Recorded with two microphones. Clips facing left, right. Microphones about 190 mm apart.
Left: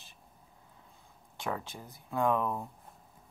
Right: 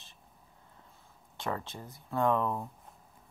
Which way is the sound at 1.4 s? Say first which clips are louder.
Right 1 dB; centre (ahead or behind).